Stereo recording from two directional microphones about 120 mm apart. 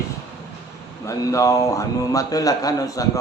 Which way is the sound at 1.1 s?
25° left (ahead or behind).